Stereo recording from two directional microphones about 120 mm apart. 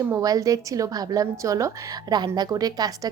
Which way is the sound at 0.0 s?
25° right (ahead or behind).